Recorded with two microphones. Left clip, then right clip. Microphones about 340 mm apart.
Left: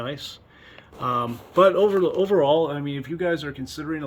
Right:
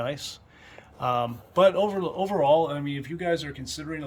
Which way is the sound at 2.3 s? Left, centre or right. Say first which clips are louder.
Right 1 dB; right.